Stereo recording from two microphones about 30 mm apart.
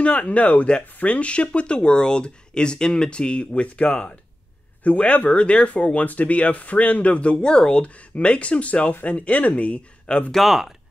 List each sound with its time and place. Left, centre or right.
0.0 s speech: left
5.9 s speech: left
7.4 s speech: left
7.8 s speech: left
10.1 s speech: left
10.4 s speech: centre